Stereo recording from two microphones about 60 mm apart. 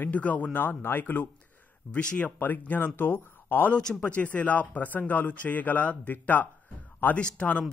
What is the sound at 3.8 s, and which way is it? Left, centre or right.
Speech, centre.